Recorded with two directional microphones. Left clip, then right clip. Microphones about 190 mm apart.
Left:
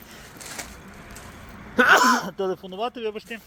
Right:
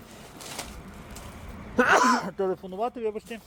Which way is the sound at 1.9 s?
5° left (ahead or behind).